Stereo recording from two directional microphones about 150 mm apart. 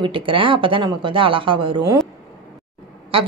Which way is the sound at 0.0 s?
35° right (ahead or behind).